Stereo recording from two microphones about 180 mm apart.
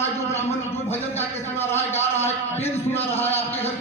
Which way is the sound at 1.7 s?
15° left (ahead or behind).